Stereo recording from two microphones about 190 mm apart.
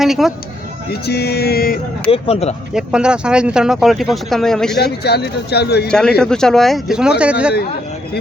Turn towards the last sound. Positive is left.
turn(degrees=-5)  # may be behind; listen again after turning